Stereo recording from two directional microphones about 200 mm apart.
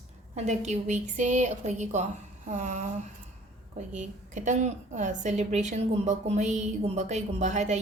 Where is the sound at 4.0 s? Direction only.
40° right (ahead or behind).